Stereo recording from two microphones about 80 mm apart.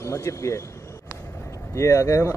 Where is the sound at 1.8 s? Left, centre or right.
Left.